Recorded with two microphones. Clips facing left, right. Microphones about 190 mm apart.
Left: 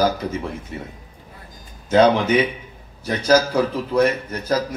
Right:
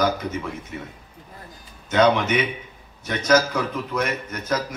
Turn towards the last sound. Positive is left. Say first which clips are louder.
# left 3 dB
turn(degrees=30)  # may be behind; listen again after turning